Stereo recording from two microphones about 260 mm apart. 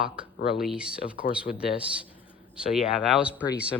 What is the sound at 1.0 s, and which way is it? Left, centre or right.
Speech, left.